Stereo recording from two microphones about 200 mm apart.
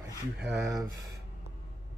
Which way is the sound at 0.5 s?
Centre (ahead or behind).